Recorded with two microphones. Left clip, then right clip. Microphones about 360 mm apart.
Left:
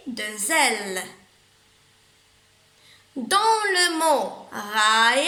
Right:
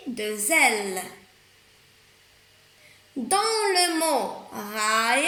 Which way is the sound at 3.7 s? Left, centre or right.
Left.